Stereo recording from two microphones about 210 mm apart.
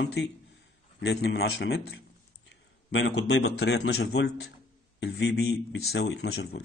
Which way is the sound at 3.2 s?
80° left.